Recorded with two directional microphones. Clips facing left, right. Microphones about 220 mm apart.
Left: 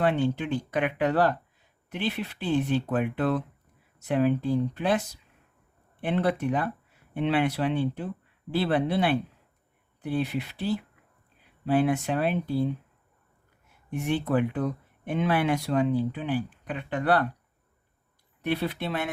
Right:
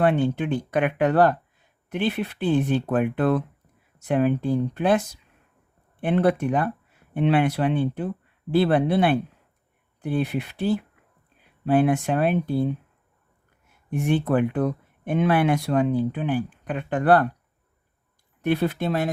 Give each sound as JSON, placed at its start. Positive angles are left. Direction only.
{"t": 0.0, "sound": "speech", "side_deg": -55}
{"t": 13.9, "sound": "speech", "side_deg": -55}
{"t": 18.4, "sound": "speech", "side_deg": -45}